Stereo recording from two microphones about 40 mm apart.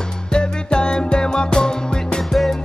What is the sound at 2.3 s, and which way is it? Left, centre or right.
Music, centre.